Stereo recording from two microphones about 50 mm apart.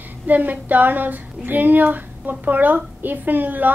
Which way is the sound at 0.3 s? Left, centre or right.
Right.